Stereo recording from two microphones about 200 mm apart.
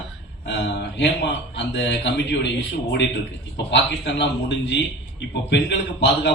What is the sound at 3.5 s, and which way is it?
A man's voice, 60° left (ahead or behind).